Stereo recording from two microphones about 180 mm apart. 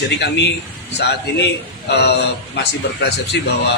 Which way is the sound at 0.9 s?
70° left (ahead or behind).